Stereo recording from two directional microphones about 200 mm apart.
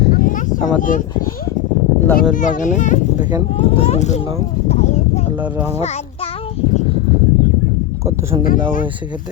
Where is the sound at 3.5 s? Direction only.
30° left (ahead or behind).